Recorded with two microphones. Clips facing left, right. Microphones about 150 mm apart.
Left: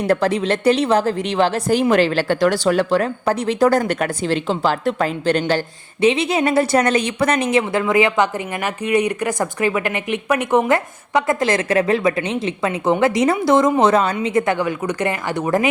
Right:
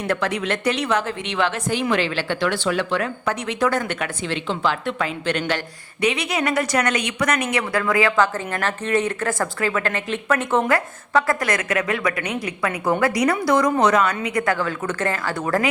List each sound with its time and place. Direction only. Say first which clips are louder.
0.1 s speech: left 5 dB; 35° left (ahead or behind)